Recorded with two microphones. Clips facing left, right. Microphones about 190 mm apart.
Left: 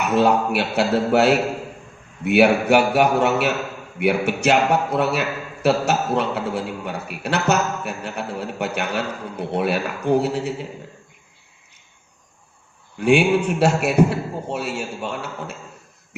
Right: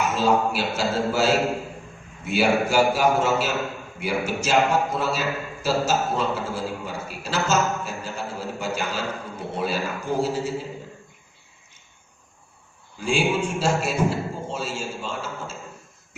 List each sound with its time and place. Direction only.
0.0 s a man's voice: 65° left (ahead or behind)
13.0 s a man's voice: 65° left (ahead or behind)